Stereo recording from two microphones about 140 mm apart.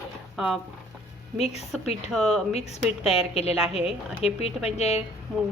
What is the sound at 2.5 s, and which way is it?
A woman's voice, 45° left (ahead or behind).